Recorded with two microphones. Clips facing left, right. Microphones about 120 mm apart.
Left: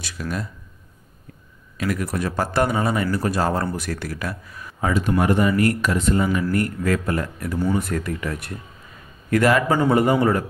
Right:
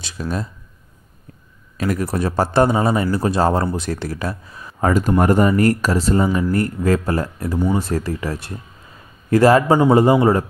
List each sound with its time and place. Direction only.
0.0 s speech: 30° right (ahead or behind)
1.8 s speech: 35° right (ahead or behind)
4.7 s speech: 45° right (ahead or behind); by 10.4 s 25° right (ahead or behind)